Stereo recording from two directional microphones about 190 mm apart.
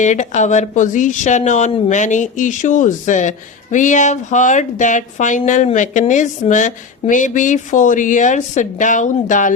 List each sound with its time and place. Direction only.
0.0 s speech: 40° left (ahead or behind)